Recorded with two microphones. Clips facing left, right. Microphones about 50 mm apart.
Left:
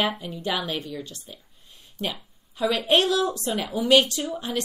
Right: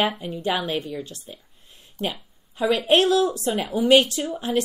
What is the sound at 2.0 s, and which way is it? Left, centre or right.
Speech, right.